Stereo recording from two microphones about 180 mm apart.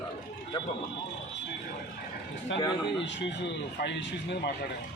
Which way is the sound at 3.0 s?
75° left (ahead or behind).